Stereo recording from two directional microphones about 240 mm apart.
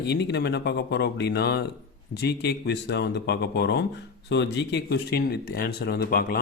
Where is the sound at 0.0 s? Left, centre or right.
Left.